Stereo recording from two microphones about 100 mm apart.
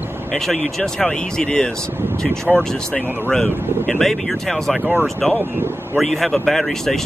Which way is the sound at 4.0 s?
5° left (ahead or behind).